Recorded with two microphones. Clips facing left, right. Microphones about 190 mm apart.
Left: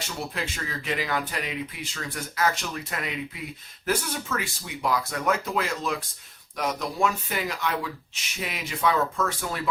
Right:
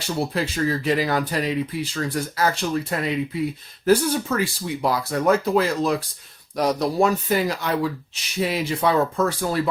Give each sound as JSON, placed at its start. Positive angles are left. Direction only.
{"t": 0.0, "sound": "speech", "side_deg": -35}